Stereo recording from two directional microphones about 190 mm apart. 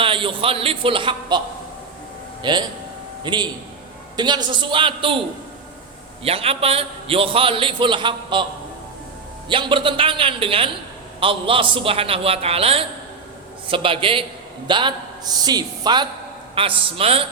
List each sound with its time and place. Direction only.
0.0 s a man's voice: 30° right (ahead or behind)
2.4 s a man's voice: 25° right (ahead or behind)
6.2 s a man's voice: 30° right (ahead or behind)
9.5 s a man's voice: 25° right (ahead or behind)